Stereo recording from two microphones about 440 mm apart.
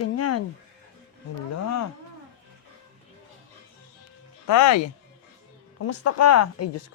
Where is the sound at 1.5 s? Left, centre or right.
Left.